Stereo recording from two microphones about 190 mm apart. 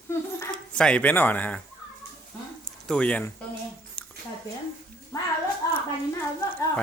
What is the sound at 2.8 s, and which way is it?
Speech, 5° left (ahead or behind).